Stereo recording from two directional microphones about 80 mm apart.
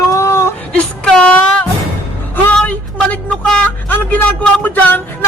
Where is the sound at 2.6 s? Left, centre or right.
Centre.